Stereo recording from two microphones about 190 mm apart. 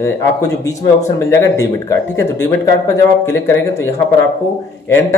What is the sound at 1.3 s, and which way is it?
Speech, 15° left (ahead or behind).